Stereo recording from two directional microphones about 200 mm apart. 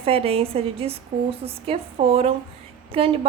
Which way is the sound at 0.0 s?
30° right (ahead or behind).